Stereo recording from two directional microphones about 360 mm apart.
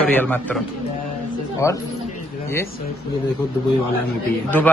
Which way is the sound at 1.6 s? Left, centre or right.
Centre.